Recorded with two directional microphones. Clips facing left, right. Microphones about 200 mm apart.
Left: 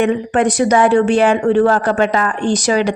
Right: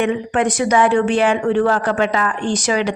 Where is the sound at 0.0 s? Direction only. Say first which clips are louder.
Left 3 dB; 40° left (ahead or behind).